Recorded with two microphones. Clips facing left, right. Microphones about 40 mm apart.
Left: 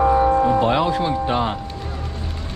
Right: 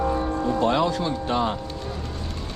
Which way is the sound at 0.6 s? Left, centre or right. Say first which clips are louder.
Left 3 dB; left.